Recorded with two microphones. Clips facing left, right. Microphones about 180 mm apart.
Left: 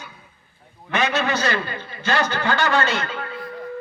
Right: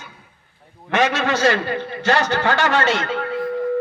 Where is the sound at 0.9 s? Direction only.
90° right.